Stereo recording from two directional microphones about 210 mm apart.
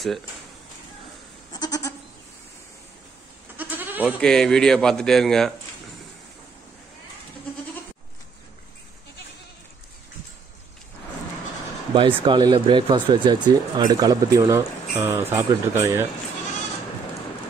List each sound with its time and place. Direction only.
1.5 s goat: 20° left (ahead or behind)
3.5 s goat: 10° right (ahead or behind)
4.2 s a man's voice: 5° left (ahead or behind)
11.9 s speech: 25° right (ahead or behind)